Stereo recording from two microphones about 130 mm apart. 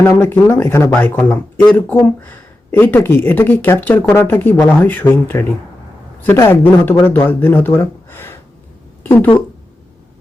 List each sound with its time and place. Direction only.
0.0 s speech: 15° left (ahead or behind)